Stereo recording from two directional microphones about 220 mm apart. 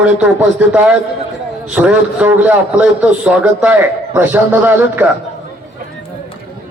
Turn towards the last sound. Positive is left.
turn(degrees=-10)  # may be behind; listen again after turning